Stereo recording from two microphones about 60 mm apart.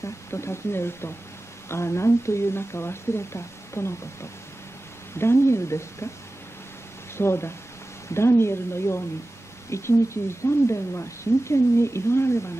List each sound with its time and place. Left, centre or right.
0.0 s speech: left
7.2 s speech: left